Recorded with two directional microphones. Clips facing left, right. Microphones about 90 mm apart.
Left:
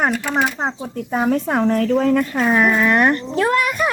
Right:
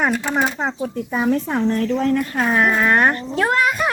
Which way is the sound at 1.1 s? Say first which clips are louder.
Left 2 dB; 55° left (ahead or behind).